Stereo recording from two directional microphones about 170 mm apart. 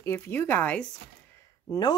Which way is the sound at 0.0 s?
15° left (ahead or behind).